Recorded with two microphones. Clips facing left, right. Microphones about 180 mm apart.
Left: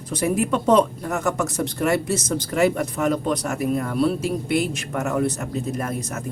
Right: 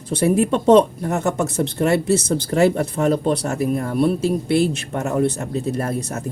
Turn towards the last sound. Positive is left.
turn(degrees=-35)  # may be behind; listen again after turning